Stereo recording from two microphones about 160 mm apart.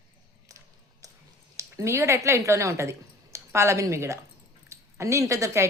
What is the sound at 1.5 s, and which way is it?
A woman's voice, 20° right (ahead or behind).